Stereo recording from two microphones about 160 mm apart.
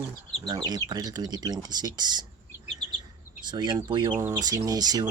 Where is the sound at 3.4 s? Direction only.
25° right (ahead or behind).